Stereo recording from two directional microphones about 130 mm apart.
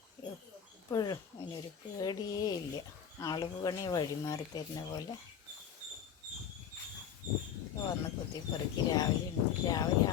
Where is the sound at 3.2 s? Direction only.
30° left (ahead or behind).